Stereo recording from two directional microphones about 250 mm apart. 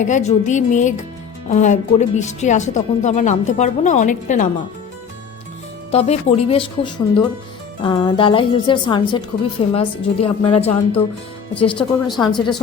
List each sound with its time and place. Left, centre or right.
0.0 s speech: left
5.9 s speech: left
11.8 s a woman's voice: centre